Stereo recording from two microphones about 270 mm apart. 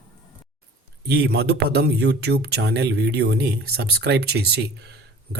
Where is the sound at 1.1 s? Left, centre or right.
Right.